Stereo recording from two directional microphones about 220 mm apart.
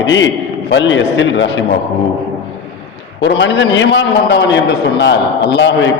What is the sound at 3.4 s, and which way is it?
A man's voice, 55° left (ahead or behind).